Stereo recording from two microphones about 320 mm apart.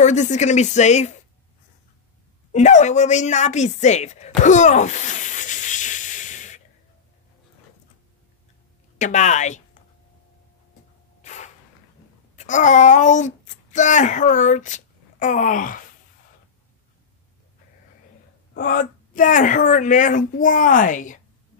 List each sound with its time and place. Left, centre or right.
0.0 s a woman's voice: left
2.5 s a woman's voice: left
4.4 s a sound: left
8.9 s a woman's voice: left
11.2 s a sound: left
12.4 s speech: left
18.5 s a woman's voice: left